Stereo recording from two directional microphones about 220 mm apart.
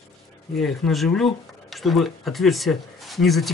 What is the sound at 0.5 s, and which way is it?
Speech, centre (ahead or behind).